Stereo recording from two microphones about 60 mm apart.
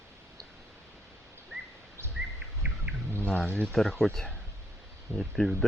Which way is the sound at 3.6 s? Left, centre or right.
Centre.